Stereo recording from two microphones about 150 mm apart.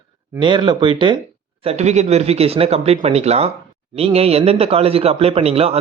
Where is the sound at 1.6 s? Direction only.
45° right (ahead or behind).